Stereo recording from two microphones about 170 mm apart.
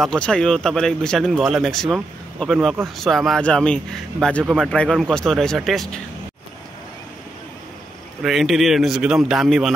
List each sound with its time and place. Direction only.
0.0 s speech: 5° left (ahead or behind)
8.2 s speech: centre (ahead or behind)